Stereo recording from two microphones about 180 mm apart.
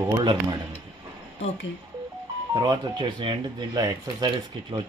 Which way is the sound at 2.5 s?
25° right (ahead or behind).